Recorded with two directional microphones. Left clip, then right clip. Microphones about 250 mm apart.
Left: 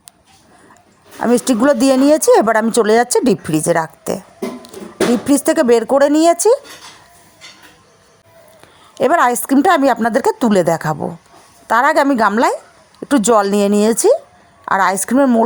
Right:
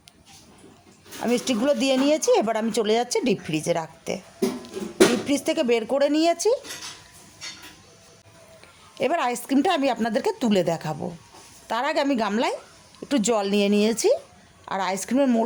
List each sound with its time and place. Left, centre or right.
1.2 s speech: left
5.2 s speech: left
9.0 s speech: left